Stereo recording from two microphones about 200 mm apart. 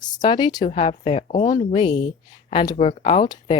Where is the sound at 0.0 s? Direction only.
20° left (ahead or behind).